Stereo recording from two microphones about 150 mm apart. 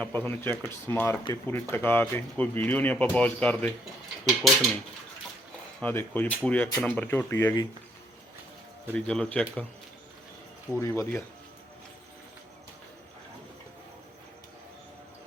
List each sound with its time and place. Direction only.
0.0 s speech: 10° left (ahead or behind)
5.8 s speech: 15° left (ahead or behind)
8.9 s speech: 10° left (ahead or behind)
10.8 s speech: 20° left (ahead or behind)